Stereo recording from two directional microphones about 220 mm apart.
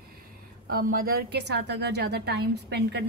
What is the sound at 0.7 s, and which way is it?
A woman's voice, 40° right (ahead or behind).